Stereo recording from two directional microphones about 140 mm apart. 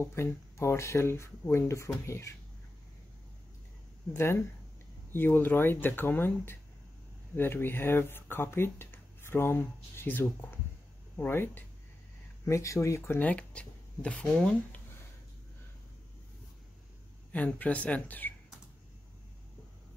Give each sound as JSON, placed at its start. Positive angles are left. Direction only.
{"t": 0.0, "sound": "speech", "side_deg": 20}
{"t": 4.1, "sound": "speech", "side_deg": 15}
{"t": 17.3, "sound": "speech", "side_deg": 10}